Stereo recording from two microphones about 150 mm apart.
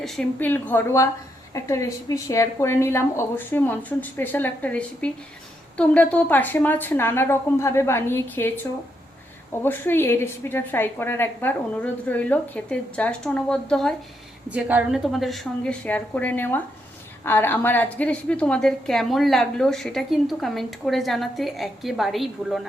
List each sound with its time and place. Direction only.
0.0 s a woman's voice: 5° left (ahead or behind)
9.6 s a woman's voice: 15° left (ahead or behind)
14.5 s a woman's voice: 10° right (ahead or behind)